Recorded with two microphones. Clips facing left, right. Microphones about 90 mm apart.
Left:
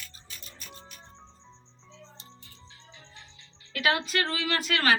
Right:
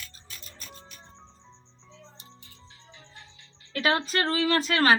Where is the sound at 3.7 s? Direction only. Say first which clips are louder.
Right 1 dB; 35° right (ahead or behind).